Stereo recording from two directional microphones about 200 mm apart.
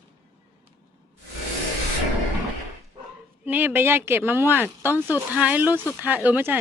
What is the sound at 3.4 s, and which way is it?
Speech, 10° right (ahead or behind).